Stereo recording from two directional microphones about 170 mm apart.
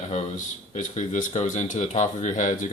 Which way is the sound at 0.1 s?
45° left (ahead or behind).